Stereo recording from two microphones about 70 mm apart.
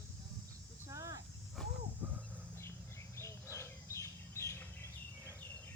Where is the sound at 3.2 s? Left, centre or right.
Left.